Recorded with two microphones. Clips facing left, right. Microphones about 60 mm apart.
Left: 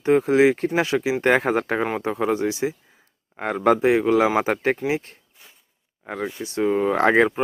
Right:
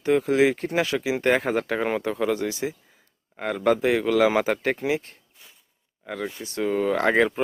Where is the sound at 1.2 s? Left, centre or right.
Left.